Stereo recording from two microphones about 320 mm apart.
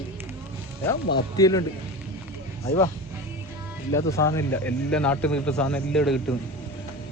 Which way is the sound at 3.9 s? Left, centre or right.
Centre.